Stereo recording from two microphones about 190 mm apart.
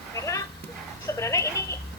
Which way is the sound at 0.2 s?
15° left (ahead or behind).